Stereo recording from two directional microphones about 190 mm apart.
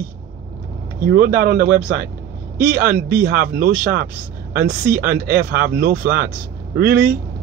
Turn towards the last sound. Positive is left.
turn(degrees=-50)  # may be behind; listen again after turning